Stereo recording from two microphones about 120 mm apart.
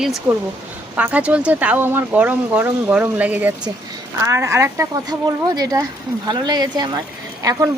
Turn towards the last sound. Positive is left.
turn(degrees=-30)  # may be behind; listen again after turning